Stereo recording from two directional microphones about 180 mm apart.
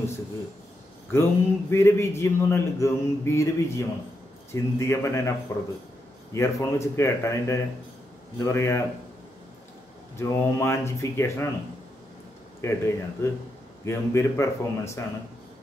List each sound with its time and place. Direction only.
1.1 s a man's voice: 15° left (ahead or behind)
10.1 s a man's voice: 15° left (ahead or behind)
12.6 s a man's voice: 15° left (ahead or behind)